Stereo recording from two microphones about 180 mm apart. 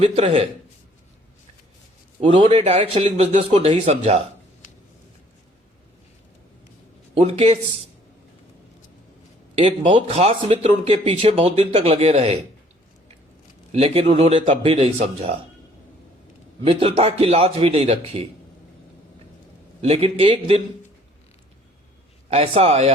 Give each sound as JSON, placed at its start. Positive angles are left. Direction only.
{"t": 0.0, "sound": "speech", "side_deg": -30}
{"t": 2.2, "sound": "speech", "side_deg": -25}
{"t": 7.1, "sound": "speech", "side_deg": -30}
{"t": 9.6, "sound": "speech", "side_deg": -30}
{"t": 13.7, "sound": "speech", "side_deg": -35}
{"t": 16.6, "sound": "speech", "side_deg": -30}
{"t": 19.8, "sound": "speech", "side_deg": -35}
{"t": 22.3, "sound": "speech", "side_deg": -30}